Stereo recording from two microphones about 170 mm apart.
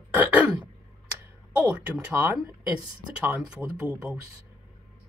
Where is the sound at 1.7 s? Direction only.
10° right (ahead or behind).